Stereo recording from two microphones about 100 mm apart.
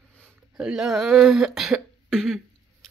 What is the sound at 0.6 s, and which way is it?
Speech, 5° right (ahead or behind).